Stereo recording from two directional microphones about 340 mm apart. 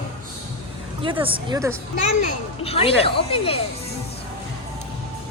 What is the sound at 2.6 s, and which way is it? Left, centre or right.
Speech, centre.